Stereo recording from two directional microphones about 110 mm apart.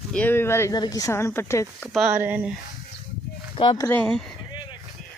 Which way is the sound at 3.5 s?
50° left (ahead or behind).